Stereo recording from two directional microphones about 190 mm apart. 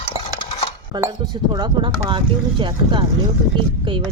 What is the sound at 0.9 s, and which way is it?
Speech, 20° right (ahead or behind).